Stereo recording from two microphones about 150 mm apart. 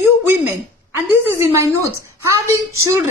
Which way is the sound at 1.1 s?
15° right (ahead or behind).